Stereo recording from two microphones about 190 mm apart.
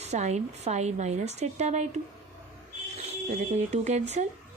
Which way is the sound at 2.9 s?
35° right (ahead or behind).